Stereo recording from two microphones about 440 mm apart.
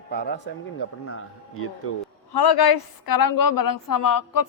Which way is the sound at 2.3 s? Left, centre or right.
Left.